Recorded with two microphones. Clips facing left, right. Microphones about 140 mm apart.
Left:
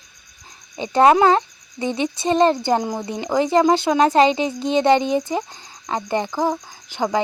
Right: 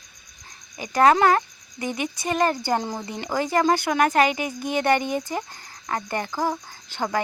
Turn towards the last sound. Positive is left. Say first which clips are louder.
# left 5 dB
turn(degrees=15)  # may be behind; listen again after turning